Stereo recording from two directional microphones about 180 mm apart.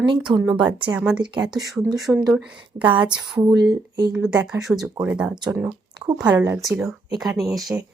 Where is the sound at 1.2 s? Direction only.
25° right (ahead or behind).